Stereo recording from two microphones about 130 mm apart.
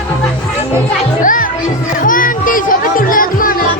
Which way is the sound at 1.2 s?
90° left.